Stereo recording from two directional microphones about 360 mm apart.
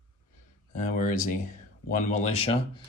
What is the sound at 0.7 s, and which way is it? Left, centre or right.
Speech, left.